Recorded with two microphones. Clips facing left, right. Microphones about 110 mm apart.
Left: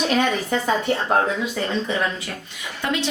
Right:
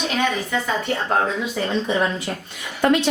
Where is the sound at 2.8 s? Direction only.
50° right (ahead or behind).